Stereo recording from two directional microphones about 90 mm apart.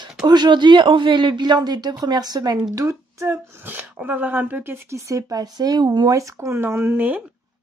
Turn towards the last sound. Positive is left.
turn(degrees=-20)  # may be behind; listen again after turning